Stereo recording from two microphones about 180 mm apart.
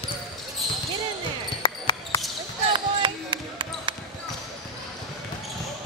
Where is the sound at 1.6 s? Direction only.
20° left (ahead or behind).